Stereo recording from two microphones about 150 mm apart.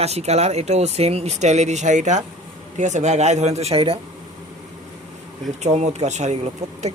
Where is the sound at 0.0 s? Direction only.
45° right (ahead or behind).